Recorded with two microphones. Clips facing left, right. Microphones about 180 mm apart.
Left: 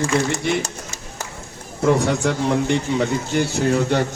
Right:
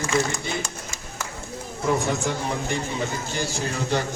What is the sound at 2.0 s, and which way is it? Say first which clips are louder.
A man's voice: left 6 dB; 70° left (ahead or behind).